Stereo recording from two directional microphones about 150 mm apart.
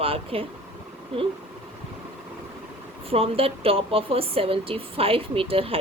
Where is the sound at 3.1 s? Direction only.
40° right (ahead or behind).